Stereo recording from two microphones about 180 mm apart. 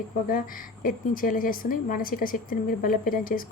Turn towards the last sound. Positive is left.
turn(degrees=50)  # may be behind; listen again after turning